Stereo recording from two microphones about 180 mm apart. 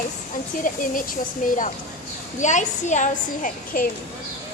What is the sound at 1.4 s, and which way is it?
A woman's voice, 50° left (ahead or behind).